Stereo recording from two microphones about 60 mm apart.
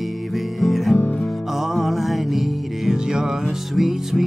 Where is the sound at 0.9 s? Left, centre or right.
Left.